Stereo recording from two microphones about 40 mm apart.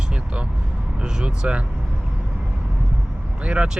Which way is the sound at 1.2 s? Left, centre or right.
Right.